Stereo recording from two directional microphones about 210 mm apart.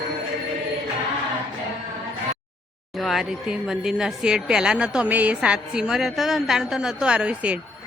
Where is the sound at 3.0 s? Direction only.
Centre (ahead or behind).